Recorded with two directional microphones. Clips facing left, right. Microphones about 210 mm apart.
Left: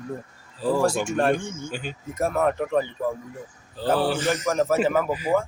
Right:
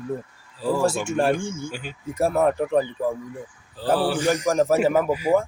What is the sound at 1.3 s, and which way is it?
Speech, 30° right (ahead or behind).